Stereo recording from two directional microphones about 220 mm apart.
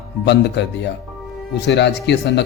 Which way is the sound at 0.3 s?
50° left (ahead or behind).